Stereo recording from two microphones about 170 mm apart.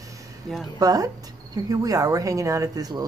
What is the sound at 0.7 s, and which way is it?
Speech, 20° right (ahead or behind).